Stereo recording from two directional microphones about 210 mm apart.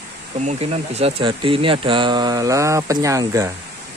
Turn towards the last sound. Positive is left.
turn(degrees=-15)  # may be behind; listen again after turning